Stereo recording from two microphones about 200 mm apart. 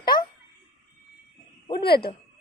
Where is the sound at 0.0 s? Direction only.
20° left (ahead or behind).